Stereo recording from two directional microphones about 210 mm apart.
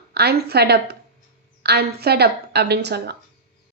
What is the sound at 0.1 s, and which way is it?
A woman's voice, 50° right (ahead or behind).